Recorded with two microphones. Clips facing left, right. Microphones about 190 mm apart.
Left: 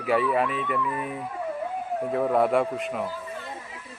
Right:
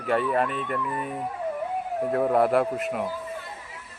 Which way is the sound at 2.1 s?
Centre (ahead or behind).